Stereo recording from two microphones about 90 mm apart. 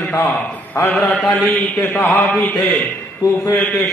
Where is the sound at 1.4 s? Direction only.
20° left (ahead or behind).